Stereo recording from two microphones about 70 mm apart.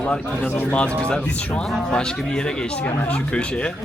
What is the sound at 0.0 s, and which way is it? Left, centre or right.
Speech, centre.